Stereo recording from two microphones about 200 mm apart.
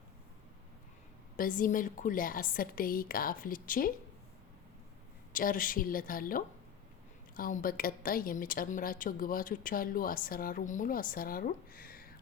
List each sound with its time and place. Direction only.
1.4 s a woman's voice: 45° left (ahead or behind)
5.3 s a woman's voice: 45° left (ahead or behind)